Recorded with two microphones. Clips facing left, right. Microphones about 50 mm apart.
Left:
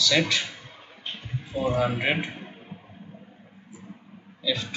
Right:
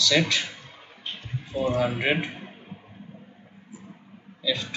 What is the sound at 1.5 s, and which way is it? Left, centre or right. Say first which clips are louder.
A man's voice: even; centre.